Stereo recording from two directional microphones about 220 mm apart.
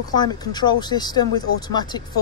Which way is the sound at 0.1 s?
20° left (ahead or behind).